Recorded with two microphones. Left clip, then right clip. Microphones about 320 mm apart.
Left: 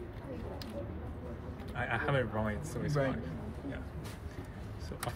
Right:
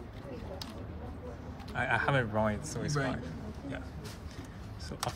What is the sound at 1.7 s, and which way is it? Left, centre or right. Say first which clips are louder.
Speech: right 4 dB; right.